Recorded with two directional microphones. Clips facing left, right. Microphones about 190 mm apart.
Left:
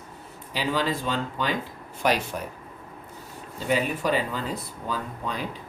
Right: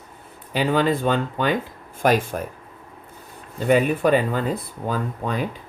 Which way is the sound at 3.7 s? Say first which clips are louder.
Right 7 dB; 55° right (ahead or behind).